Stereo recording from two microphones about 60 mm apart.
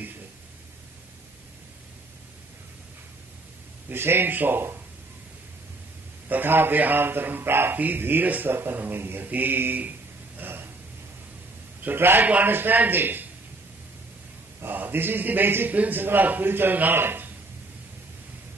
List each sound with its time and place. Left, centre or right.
3.9 s a man's voice: right
6.2 s a man's voice: right
11.8 s a man's voice: right
14.6 s a man's voice: right